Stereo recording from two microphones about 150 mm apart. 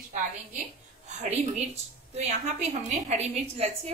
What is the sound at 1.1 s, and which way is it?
A woman's voice, 50° right (ahead or behind).